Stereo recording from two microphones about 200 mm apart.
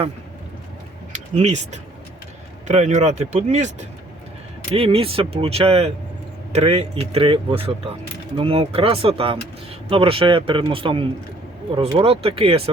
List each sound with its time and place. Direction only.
1.1 s speech: 35° right (ahead or behind)